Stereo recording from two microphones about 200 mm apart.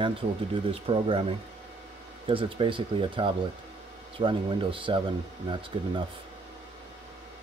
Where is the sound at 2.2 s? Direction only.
25° right (ahead or behind).